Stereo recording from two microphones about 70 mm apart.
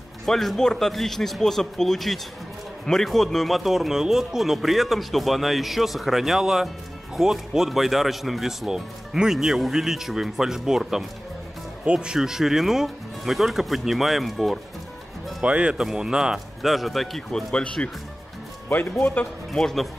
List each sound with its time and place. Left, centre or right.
0.2 s speech: centre
15.4 s speech: centre
18.7 s speech: left
19.5 s speech: centre